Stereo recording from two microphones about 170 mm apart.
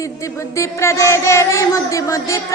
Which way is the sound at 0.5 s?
15° left (ahead or behind).